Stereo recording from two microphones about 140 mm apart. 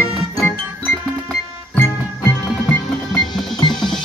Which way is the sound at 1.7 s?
15° left (ahead or behind).